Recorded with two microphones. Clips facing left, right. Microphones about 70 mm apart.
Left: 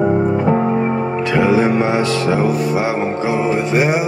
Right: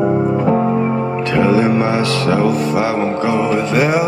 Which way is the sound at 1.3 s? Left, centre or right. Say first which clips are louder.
Right 1 dB; centre.